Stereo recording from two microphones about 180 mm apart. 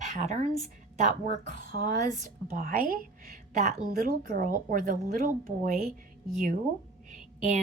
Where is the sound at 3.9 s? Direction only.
50° right (ahead or behind).